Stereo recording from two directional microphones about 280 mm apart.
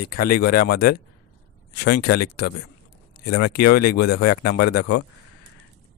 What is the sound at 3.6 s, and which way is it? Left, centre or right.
Speech, left.